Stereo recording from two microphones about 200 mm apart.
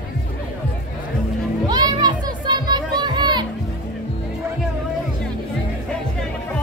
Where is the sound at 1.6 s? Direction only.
20° right (ahead or behind).